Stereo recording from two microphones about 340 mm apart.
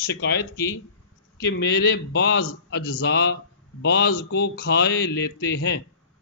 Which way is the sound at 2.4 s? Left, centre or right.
Left.